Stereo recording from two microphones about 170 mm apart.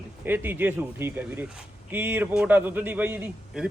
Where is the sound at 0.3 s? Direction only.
10° right (ahead or behind).